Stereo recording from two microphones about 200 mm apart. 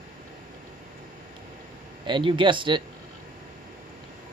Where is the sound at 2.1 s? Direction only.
25° right (ahead or behind).